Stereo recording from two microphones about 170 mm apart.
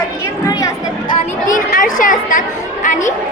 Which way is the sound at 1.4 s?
50° left (ahead or behind).